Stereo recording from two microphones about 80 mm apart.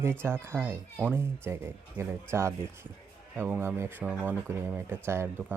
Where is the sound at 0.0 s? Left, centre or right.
Right.